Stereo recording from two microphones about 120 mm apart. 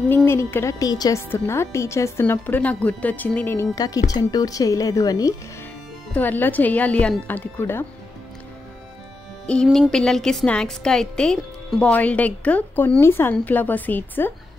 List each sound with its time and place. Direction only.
0.1 s speech: 20° left (ahead or behind)
1.3 s a woman's voice: 20° left (ahead or behind)
3.7 s speech: 30° left (ahead or behind)
6.1 s a woman's voice: 15° left (ahead or behind)
9.5 s a woman's voice: 5° left (ahead or behind)